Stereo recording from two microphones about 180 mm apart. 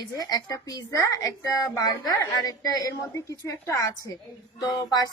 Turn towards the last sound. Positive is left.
turn(degrees=20)  # may be behind; listen again after turning